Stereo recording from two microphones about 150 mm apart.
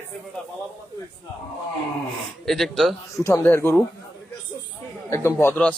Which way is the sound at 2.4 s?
Centre (ahead or behind).